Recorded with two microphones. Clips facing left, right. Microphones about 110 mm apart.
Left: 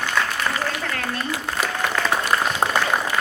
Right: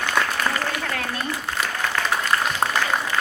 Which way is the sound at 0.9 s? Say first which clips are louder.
Left 1 dB; 5° right (ahead or behind).